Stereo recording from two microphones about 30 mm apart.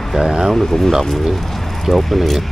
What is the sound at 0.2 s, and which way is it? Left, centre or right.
Speech, centre.